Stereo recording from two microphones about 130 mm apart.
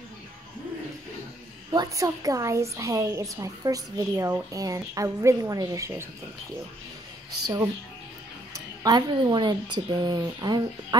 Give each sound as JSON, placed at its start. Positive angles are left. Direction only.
{"t": 1.7, "sound": "a woman's voice", "side_deg": -30}
{"t": 7.4, "sound": "a woman's voice", "side_deg": -30}